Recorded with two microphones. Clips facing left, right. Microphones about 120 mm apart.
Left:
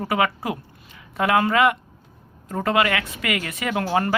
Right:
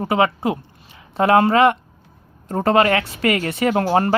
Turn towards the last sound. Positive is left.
turn(degrees=-35)  # may be behind; listen again after turning